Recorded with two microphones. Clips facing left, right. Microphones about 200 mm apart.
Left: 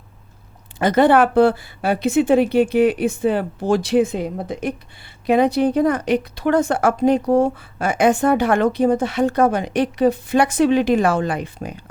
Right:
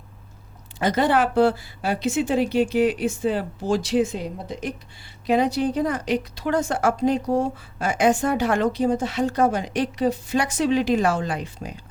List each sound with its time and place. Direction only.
0.8 s a woman's voice: 60° left (ahead or behind)